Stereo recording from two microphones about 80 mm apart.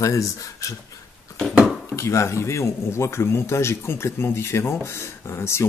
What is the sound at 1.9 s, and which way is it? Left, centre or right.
A man's voice, left.